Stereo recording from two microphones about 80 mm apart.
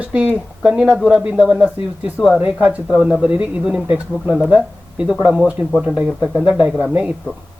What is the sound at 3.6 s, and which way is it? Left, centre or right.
Speech, centre.